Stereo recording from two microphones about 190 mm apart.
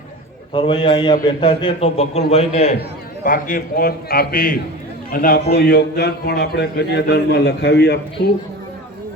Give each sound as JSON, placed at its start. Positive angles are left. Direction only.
{"t": 0.5, "sound": "a man's voice", "side_deg": 25}
{"t": 3.2, "sound": "a man's voice", "side_deg": 45}